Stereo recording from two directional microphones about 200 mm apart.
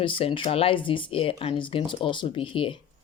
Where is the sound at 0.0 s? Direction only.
25° left (ahead or behind).